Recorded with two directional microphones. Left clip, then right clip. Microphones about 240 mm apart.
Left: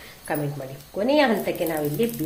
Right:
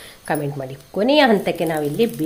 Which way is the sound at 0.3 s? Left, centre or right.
Right.